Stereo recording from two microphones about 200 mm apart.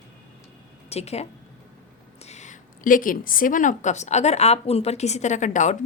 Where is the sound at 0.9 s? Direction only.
30° left (ahead or behind).